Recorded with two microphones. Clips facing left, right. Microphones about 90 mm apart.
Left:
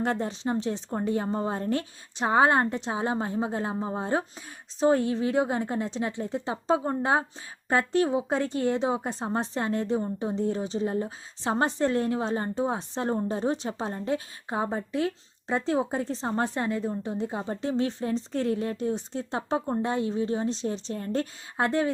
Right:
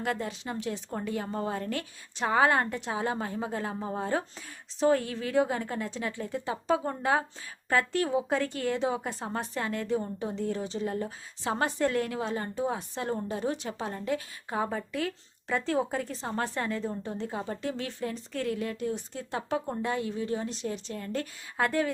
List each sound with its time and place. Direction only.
0.0 s speech: 30° left (ahead or behind)